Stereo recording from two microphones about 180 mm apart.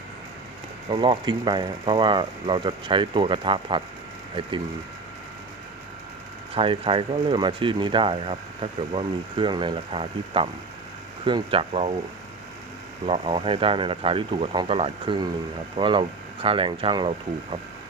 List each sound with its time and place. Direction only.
0.9 s speech: 25° right (ahead or behind)
6.5 s speech: 30° right (ahead or behind)
13.1 s speech: 30° right (ahead or behind)